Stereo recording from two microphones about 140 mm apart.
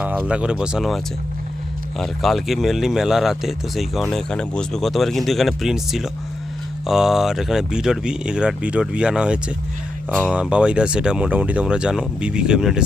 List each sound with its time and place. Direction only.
0.0 s speech: 10° right (ahead or behind)